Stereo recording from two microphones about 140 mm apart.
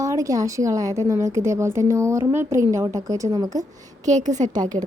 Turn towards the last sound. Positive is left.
turn(degrees=-60)  # may be behind; listen again after turning